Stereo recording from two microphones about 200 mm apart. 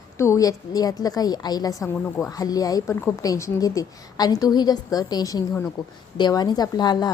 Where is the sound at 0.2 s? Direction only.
15° left (ahead or behind).